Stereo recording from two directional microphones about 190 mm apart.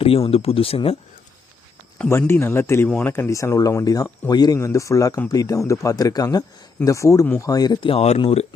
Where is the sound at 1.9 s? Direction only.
10° left (ahead or behind).